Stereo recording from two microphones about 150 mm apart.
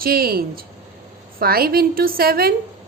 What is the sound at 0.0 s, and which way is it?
A woman's voice, 85° right.